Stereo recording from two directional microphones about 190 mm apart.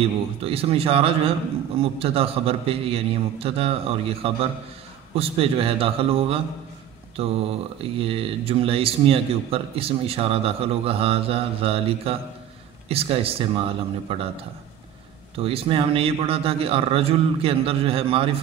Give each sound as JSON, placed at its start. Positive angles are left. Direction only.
{"t": 0.0, "sound": "a man's voice", "side_deg": -30}
{"t": 15.3, "sound": "a man's voice", "side_deg": -30}